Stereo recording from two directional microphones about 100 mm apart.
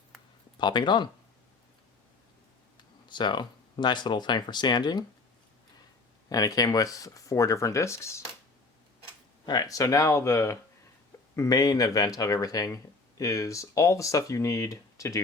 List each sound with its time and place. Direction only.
0.6 s speech: 50° left (ahead or behind)
3.1 s speech: 50° left (ahead or behind)
6.2 s speech: 40° left (ahead or behind)
9.5 s speech: 40° left (ahead or behind)